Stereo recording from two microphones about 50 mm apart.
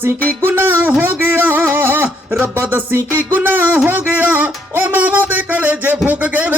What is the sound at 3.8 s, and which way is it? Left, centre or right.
Music, right.